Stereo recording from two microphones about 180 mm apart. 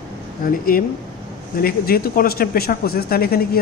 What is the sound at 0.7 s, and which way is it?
Speech, 55° left (ahead or behind).